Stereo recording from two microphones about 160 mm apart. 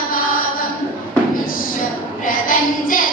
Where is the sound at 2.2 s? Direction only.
60° left (ahead or behind).